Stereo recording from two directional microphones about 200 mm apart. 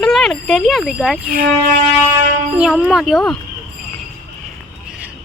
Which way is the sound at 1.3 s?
45° right (ahead or behind).